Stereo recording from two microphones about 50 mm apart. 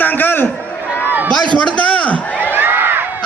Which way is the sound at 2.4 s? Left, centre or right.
Right.